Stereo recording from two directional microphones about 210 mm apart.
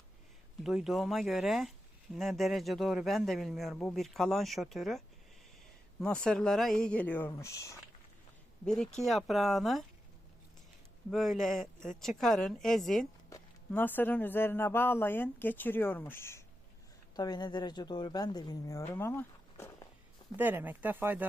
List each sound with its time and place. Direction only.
0.6 s speech: centre (ahead or behind); by 7.8 s 15° left (ahead or behind)
8.6 s speech: 5° left (ahead or behind)
11.1 s speech: centre (ahead or behind); by 18.9 s 15° left (ahead or behind)
18.9 s walk: 10° left (ahead or behind)
20.3 s speech: 10° right (ahead or behind)